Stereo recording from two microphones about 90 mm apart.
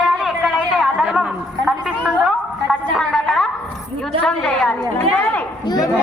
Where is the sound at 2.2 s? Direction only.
Centre (ahead or behind).